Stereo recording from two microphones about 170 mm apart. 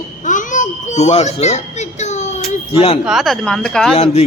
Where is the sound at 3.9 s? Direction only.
40° left (ahead or behind).